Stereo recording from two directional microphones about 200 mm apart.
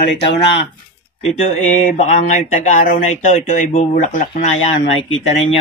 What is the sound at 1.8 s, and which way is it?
Speech, 35° left (ahead or behind).